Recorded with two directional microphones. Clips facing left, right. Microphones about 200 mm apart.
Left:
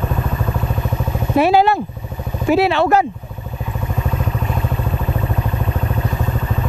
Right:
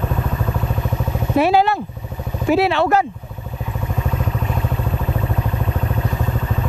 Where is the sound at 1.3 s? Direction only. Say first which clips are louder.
Left 2 dB; 10° left (ahead or behind).